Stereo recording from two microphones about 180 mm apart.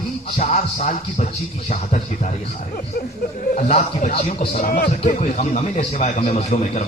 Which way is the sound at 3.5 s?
40° left (ahead or behind).